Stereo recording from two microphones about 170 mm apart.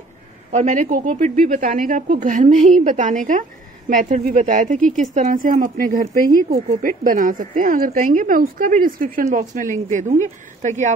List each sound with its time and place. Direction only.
0.5 s speech: 45° right (ahead or behind)